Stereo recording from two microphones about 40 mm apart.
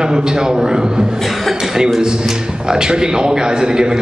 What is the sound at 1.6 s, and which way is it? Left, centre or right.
A man's voice, centre.